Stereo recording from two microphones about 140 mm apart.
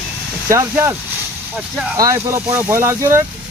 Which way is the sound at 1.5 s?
5° right (ahead or behind).